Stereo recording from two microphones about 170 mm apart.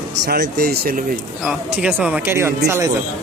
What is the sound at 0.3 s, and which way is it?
Speech, 70° right (ahead or behind).